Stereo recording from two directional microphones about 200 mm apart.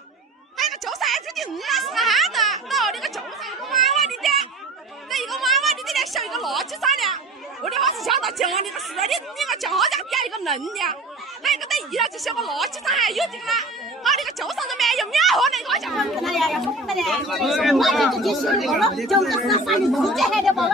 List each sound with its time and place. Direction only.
0.6 s speech: centre (ahead or behind)
3.7 s children playing: centre (ahead or behind)
5.1 s a woman's voice: centre (ahead or behind)